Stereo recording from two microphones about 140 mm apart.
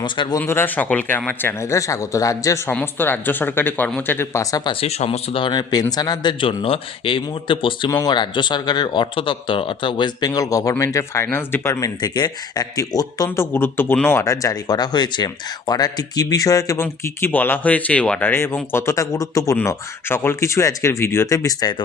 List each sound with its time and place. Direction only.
0.0 s speech: 35° left (ahead or behind)
0.4 s speech: 15° left (ahead or behind)
4.6 s speech: 40° left (ahead or behind)
7.9 s speech: 25° left (ahead or behind)